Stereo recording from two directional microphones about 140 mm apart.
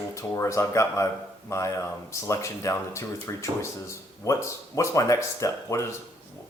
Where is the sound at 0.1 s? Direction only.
20° left (ahead or behind).